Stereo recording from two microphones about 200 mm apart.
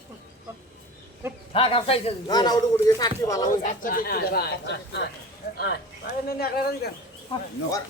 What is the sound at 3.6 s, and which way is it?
Speech, 45° left (ahead or behind).